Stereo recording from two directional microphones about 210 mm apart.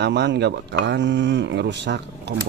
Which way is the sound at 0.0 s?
55° right (ahead or behind).